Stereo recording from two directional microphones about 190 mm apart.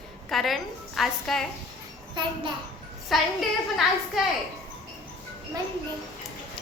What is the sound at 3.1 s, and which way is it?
A woman's voice, centre (ahead or behind).